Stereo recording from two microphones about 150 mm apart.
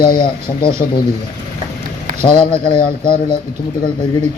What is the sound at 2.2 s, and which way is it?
Speech, 35° left (ahead or behind).